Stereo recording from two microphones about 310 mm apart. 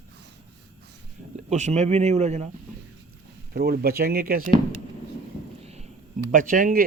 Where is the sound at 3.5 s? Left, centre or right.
Right.